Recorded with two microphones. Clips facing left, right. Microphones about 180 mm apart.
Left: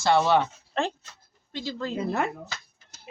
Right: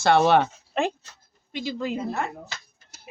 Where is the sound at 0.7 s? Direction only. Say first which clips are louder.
Right 3 dB; 15° right (ahead or behind).